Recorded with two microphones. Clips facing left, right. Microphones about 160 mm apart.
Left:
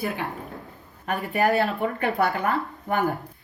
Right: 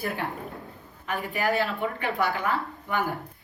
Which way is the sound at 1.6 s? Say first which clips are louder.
Left 4 dB; 40° left (ahead or behind).